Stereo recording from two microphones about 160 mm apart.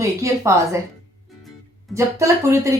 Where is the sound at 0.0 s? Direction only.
20° right (ahead or behind).